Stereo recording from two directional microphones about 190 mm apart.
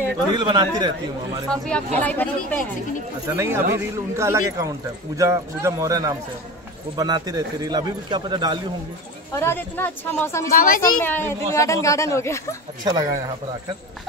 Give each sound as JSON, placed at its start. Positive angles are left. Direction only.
{"t": 0.5, "sound": "a man's voice", "side_deg": -25}
{"t": 2.0, "sound": "a child's voice", "side_deg": 10}
{"t": 3.3, "sound": "a man's voice", "side_deg": -10}
{"t": 9.3, "sound": "a child's voice", "side_deg": 10}
{"t": 10.5, "sound": "a woman's voice", "side_deg": 45}
{"t": 11.0, "sound": "a child's voice", "side_deg": 10}
{"t": 12.8, "sound": "a man's voice", "side_deg": -20}